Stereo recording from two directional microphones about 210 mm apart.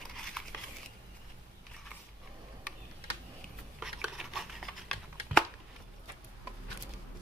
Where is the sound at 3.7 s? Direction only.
5° right (ahead or behind).